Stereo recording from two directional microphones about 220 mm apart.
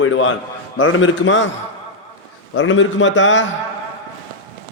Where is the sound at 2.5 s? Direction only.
60° left (ahead or behind).